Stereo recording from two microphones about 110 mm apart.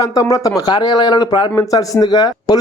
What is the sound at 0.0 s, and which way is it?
Speech, 30° left (ahead or behind).